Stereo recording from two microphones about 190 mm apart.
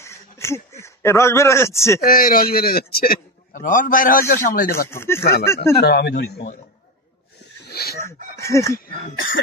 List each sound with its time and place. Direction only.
0.0 s a sound: 15° left (ahead or behind)
2.0 s a man's voice: 50° left (ahead or behind)
4.8 s speech: 15° left (ahead or behind)
5.9 s a man's voice: 60° left (ahead or behind)
7.7 s chicken: 55° left (ahead or behind)
8.4 s speech: 15° left (ahead or behind)